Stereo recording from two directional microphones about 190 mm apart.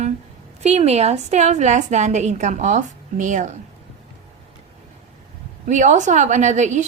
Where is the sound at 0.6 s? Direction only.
35° right (ahead or behind).